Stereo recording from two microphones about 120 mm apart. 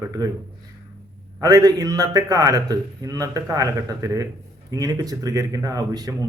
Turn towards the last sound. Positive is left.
turn(degrees=-30)  # may be behind; listen again after turning